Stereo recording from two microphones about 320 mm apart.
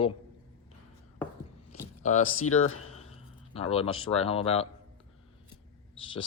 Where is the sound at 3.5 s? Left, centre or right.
Centre.